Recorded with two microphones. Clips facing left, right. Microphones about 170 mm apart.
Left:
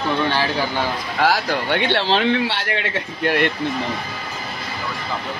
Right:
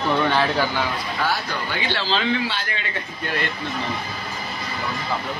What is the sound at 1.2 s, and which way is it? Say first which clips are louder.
Speech: left 8 dB; 90° left.